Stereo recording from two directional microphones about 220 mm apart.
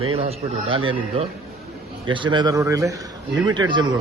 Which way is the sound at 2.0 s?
20° right (ahead or behind).